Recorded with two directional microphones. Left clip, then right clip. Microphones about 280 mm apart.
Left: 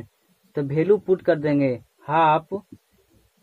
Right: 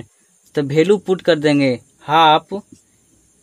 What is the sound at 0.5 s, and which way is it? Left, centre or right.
Speech, right.